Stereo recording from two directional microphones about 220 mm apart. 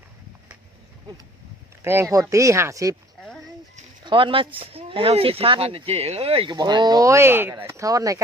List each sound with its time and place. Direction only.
1.8 s speech: 10° right (ahead or behind)
4.0 s speech: 20° right (ahead or behind)